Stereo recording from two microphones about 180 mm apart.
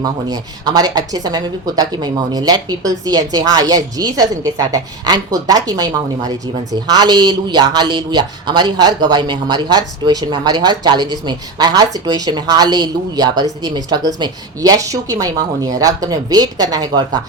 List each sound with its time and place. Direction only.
0.0 s speech: 20° right (ahead or behind)